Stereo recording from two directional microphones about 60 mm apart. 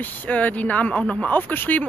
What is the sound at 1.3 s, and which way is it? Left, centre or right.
Speech, left.